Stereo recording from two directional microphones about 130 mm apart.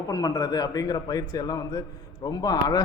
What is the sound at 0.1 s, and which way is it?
A man's voice, 30° left (ahead or behind).